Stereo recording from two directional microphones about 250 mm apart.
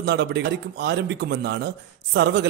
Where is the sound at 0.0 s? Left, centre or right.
Right.